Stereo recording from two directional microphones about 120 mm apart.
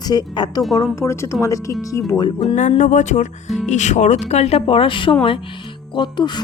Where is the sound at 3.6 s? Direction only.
80° left; by 6.4 s 40° left (ahead or behind).